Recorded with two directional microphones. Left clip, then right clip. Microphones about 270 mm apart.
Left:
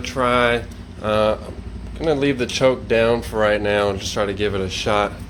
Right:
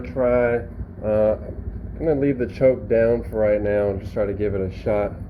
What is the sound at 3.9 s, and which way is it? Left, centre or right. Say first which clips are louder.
Speech: left 2 dB; left.